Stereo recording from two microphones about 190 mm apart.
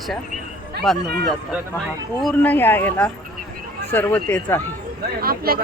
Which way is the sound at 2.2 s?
5° left (ahead or behind).